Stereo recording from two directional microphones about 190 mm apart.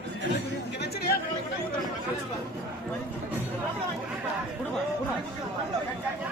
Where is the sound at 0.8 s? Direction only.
55° left (ahead or behind).